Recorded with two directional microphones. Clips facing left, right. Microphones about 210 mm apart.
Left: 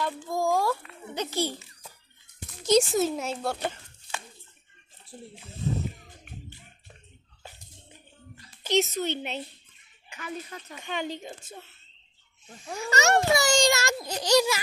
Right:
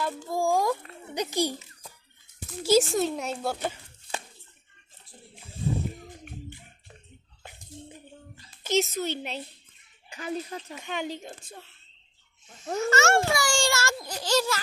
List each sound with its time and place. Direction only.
0.3 s a child's voice: 10° right (ahead or behind)
2.5 s a child's voice: centre (ahead or behind)
8.6 s speech: centre (ahead or behind)
10.1 s speech: 30° right (ahead or behind)
10.8 s speech: 5° right (ahead or behind)
12.8 s a child's voice: 15° left (ahead or behind)